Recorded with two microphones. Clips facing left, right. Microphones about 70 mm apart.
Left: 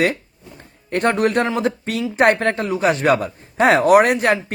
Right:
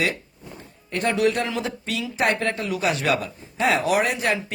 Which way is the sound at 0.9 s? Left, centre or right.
Left.